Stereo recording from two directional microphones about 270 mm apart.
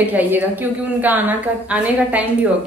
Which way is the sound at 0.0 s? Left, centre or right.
Centre.